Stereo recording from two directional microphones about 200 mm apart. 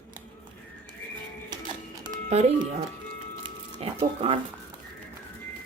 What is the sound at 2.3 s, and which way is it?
Speech, 35° right (ahead or behind).